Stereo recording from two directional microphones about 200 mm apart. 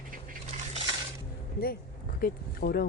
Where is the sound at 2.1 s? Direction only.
45° left (ahead or behind).